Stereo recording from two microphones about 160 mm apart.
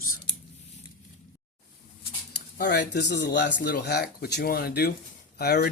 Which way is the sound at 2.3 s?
80° left.